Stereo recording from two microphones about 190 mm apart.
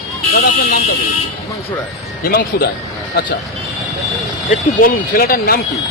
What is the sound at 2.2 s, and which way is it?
Speech, 55° left (ahead or behind).